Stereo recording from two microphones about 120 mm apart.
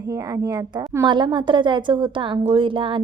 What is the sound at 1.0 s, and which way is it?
A woman's voice, 40° right (ahead or behind).